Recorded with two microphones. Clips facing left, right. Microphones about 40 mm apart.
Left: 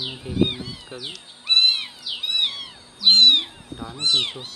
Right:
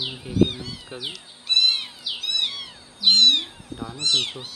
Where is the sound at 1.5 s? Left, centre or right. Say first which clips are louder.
Left 2 dB; left.